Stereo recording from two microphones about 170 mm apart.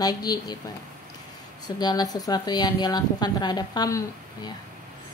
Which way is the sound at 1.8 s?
25° left (ahead or behind).